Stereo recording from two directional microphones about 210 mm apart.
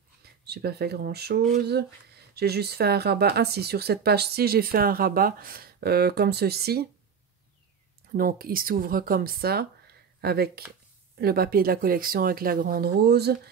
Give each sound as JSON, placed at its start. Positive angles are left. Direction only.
{"t": 0.5, "sound": "speech", "side_deg": -50}
{"t": 8.1, "sound": "speech", "side_deg": -45}